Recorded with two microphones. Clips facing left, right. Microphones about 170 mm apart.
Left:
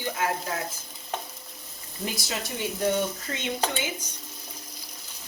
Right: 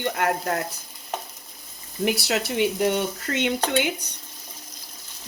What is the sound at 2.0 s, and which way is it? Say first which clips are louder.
Speech: right 9 dB; 70° right (ahead or behind).